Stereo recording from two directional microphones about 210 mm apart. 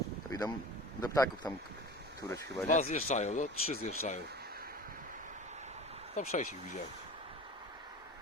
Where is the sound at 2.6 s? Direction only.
35° left (ahead or behind).